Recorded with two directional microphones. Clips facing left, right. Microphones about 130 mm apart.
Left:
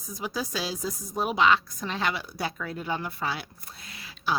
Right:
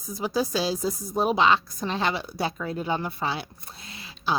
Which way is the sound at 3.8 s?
25° right (ahead or behind).